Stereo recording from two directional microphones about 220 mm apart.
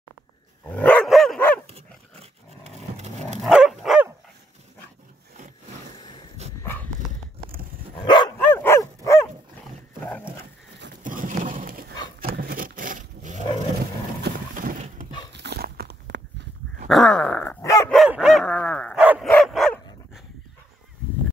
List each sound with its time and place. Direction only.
0.7 s dog: 5° left (ahead or behind)
1.7 s dog: 25° right (ahead or behind)
3.3 s dog: centre (ahead or behind)
5.9 s a sound: 20° left (ahead or behind)
6.6 s dog: 10° left (ahead or behind)
8.0 s dog: 20° left (ahead or behind)
8.4 s dog: 10° left (ahead or behind)
11.0 s a sound: 35° right (ahead or behind)
14.2 s horse: 40° right (ahead or behind)
15.3 s a sound: 50° right (ahead or behind)
16.8 s dog: 5° left (ahead or behind)
17.8 s dog: centre (ahead or behind)